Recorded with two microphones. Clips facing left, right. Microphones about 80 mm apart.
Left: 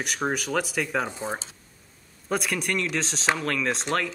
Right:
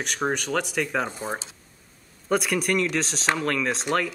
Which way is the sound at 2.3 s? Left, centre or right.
Centre.